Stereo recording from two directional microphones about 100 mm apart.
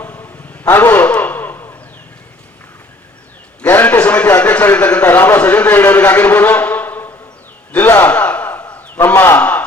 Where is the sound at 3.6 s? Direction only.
20° left (ahead or behind).